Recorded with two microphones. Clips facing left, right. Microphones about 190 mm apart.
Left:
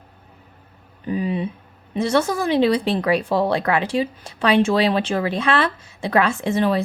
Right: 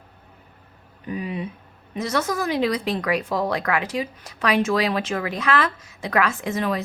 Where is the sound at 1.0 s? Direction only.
30° left (ahead or behind).